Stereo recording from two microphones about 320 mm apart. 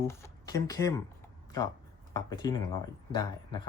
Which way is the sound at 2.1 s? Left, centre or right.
Centre.